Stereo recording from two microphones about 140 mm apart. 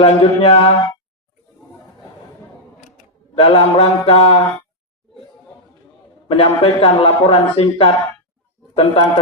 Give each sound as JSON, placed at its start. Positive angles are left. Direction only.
{"t": 0.0, "sound": "a man's voice", "side_deg": 45}
{"t": 3.3, "sound": "a man's voice", "side_deg": 45}
{"t": 6.2, "sound": "a man's voice", "side_deg": 45}